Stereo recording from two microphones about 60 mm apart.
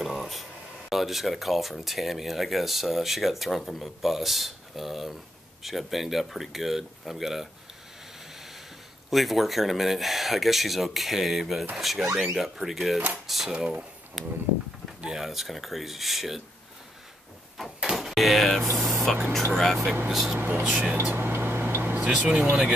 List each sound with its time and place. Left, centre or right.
0.0 s speech: centre
9.1 s speech: centre
13.5 s speech: centre
14.2 s speech: centre
17.7 s a sound: centre
19.1 s speech: centre
20.3 s speech: right
20.6 s speech: right
21.0 s a sound: right
22.1 s speech: right